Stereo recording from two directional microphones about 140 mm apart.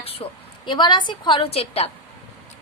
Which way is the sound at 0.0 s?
40° left (ahead or behind).